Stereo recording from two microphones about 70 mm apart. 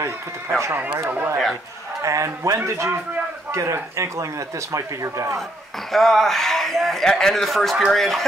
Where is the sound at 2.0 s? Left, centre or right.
Right.